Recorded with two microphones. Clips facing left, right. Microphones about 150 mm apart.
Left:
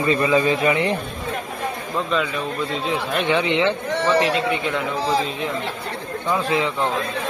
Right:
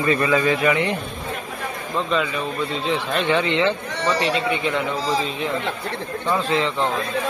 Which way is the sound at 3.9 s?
55° left (ahead or behind).